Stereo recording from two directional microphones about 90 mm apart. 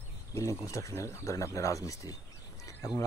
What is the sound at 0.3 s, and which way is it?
Speech, 35° left (ahead or behind).